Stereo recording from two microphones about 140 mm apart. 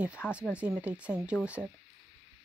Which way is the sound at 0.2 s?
15° left (ahead or behind).